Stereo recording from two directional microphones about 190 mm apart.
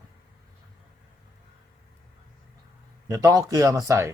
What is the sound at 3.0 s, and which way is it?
Speech, 20° right (ahead or behind).